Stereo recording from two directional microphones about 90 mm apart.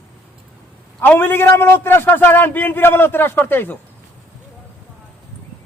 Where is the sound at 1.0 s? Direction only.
20° left (ahead or behind).